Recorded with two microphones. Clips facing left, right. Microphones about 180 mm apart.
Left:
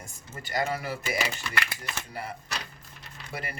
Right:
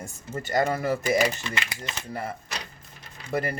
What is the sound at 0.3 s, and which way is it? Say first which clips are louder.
Speech: right 5 dB; 50° right (ahead or behind).